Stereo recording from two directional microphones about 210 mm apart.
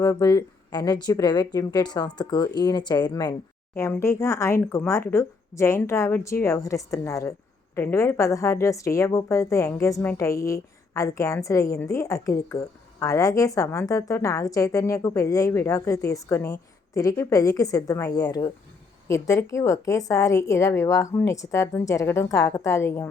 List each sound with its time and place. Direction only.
0.0 s a woman's voice: 20° left (ahead or behind)